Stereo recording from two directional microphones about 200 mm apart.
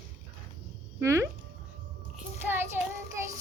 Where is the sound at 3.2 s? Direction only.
15° right (ahead or behind).